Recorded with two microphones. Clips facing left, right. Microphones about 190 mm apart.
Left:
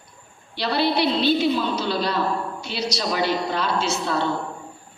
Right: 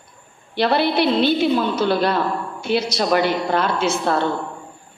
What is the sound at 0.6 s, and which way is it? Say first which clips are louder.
A woman's voice: right 4 dB; 55° right (ahead or behind).